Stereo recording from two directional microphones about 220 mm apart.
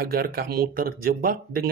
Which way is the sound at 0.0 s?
45° right (ahead or behind).